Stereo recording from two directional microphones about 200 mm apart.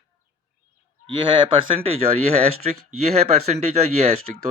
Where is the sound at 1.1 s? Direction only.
25° right (ahead or behind).